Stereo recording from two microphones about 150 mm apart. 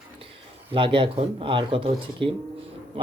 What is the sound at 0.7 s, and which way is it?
Speech, 35° right (ahead or behind).